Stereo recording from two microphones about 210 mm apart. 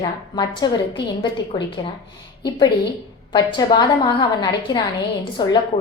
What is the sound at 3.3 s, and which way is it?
A woman's voice, 20° left (ahead or behind).